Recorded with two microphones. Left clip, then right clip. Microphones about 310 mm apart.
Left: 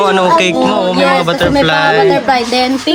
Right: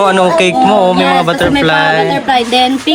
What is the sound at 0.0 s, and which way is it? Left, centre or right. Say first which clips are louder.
Music: right 1 dB; centre.